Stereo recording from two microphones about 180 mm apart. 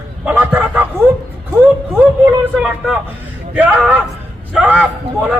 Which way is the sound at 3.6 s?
10° right (ahead or behind).